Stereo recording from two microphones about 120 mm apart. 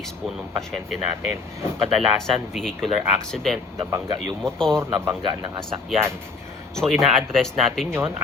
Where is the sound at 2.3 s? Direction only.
Centre (ahead or behind).